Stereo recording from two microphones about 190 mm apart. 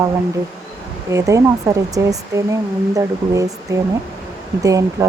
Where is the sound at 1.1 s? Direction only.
15° right (ahead or behind).